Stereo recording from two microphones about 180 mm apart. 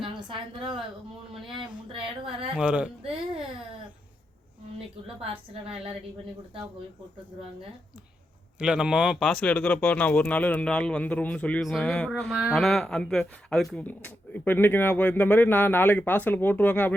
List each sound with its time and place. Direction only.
0.0 s a woman's voice: 30° right (ahead or behind)
1.9 s speech: 30° right (ahead or behind)
2.6 s speech: 5° right (ahead or behind)
3.0 s speech: 30° right (ahead or behind)
5.2 s speech: 35° right (ahead or behind)
8.5 s speech: 5° right (ahead or behind)